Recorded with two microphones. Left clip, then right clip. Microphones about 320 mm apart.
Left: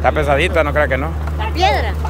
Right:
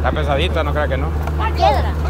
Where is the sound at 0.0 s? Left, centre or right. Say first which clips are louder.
Left 5 dB; centre.